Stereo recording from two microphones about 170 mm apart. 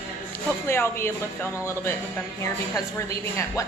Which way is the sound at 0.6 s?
15° left (ahead or behind).